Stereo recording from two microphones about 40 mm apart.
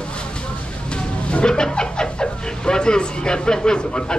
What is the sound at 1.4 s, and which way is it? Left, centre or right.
Speech, centre.